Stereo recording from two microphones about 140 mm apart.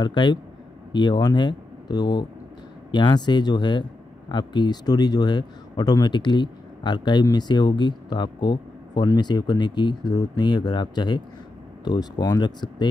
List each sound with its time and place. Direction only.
0.0 s a man's voice: 30° left (ahead or behind)